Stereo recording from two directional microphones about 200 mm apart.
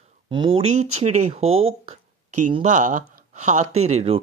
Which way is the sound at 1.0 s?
35° right (ahead or behind).